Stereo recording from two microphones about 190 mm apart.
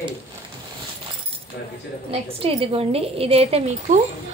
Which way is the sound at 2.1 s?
30° right (ahead or behind).